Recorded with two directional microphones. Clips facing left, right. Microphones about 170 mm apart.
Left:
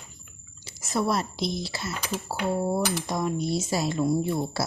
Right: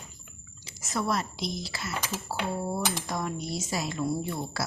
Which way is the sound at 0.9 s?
30° left (ahead or behind).